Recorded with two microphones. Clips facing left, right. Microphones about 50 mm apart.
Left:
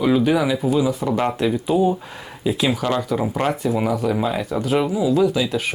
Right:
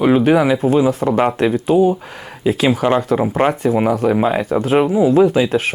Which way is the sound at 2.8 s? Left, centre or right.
Right.